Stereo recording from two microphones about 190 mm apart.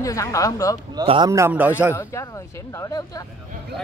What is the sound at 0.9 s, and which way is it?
Speech, 25° right (ahead or behind).